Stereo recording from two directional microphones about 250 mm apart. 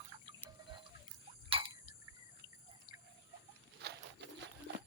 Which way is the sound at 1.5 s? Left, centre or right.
Right.